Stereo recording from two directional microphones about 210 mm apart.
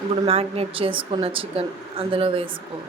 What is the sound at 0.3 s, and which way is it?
Speech, 30° right (ahead or behind).